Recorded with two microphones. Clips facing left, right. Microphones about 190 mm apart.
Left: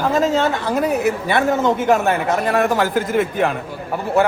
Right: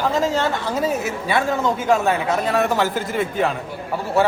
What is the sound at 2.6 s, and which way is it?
Speech, 50° left (ahead or behind).